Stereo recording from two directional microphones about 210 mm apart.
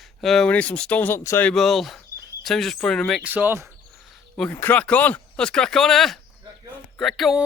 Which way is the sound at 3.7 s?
Centre (ahead or behind).